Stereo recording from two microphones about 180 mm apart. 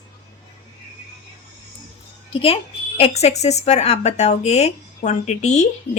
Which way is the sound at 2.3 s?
30° left (ahead or behind).